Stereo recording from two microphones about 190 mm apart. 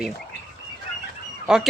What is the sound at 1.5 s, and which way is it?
Speech, 5° right (ahead or behind).